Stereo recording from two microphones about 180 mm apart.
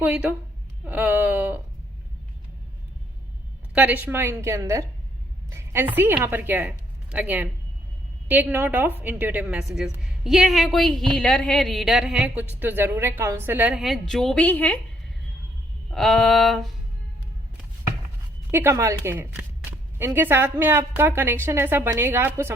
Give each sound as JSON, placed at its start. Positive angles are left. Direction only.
{"t": 0.0, "sound": "a woman's voice", "side_deg": -10}
{"t": 3.8, "sound": "a woman's voice", "side_deg": -10}
{"t": 15.9, "sound": "a woman's voice", "side_deg": 0}
{"t": 18.5, "sound": "a woman's voice", "side_deg": -15}